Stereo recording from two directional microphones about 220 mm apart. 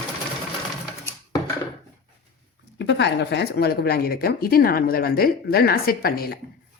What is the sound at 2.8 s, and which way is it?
Speech, 50° left (ahead or behind).